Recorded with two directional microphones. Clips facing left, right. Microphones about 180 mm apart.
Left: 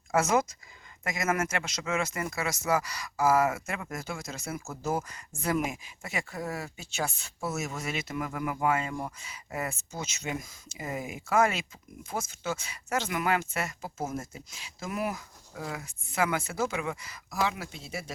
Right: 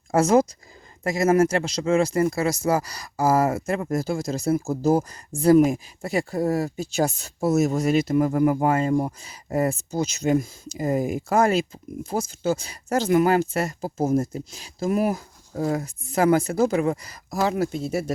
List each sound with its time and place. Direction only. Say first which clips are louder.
0.1 s speech: right 8 dB; 35° right (ahead or behind)